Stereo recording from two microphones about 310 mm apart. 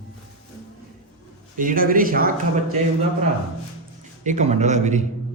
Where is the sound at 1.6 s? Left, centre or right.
Right.